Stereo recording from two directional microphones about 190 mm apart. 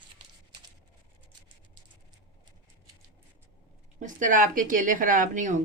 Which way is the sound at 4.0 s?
40° right (ahead or behind).